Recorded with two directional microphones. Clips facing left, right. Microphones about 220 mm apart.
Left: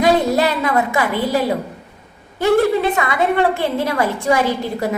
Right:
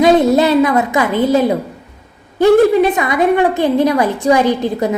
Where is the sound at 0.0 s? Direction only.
20° right (ahead or behind).